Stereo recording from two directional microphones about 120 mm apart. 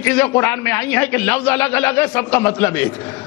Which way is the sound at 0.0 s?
20° left (ahead or behind).